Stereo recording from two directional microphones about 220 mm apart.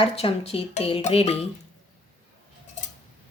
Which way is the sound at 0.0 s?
25° left (ahead or behind).